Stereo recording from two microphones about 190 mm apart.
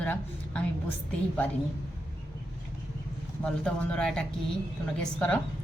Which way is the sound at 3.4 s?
5° left (ahead or behind).